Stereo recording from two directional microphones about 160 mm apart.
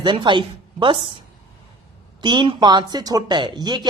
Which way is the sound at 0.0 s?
30° right (ahead or behind).